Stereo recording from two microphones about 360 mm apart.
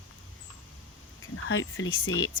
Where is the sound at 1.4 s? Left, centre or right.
Left.